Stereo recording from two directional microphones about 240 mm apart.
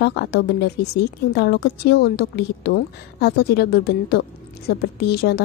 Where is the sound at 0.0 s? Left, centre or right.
Left.